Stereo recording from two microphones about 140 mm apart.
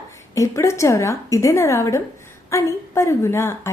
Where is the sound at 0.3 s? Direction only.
20° left (ahead or behind).